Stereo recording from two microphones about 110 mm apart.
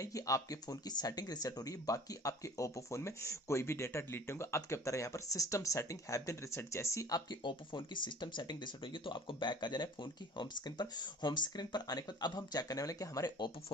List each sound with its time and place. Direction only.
0.0 s speech: 30° left (ahead or behind)